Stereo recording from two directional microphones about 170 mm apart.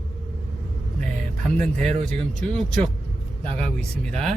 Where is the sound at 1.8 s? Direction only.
45° right (ahead or behind).